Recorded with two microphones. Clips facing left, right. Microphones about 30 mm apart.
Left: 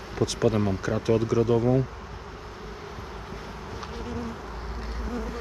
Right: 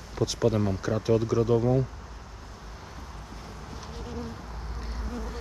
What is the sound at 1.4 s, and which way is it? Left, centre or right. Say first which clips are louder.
Speech: left 1 dB; left.